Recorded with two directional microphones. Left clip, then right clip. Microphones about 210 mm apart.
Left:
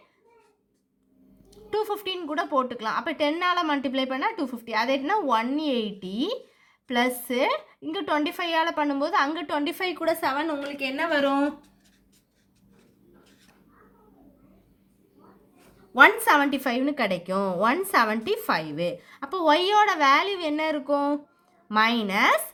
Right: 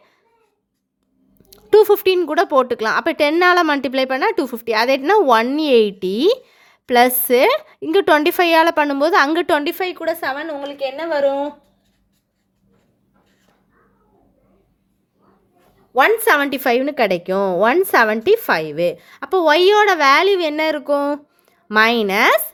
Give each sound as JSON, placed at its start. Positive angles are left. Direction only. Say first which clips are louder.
{"t": 1.4, "sound": "speech", "louder": "right 16 dB", "side_deg": -50}
{"t": 16.0, "sound": "speech", "louder": "right 4 dB", "side_deg": -35}